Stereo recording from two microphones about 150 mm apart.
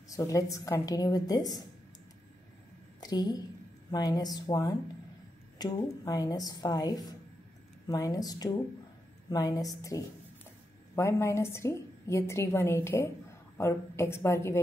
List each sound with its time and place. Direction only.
0.1 s a woman's voice: 25° left (ahead or behind)
3.0 s a woman's voice: 25° left (ahead or behind)